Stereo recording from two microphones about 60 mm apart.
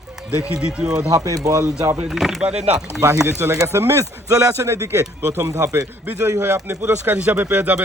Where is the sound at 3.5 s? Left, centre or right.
Right.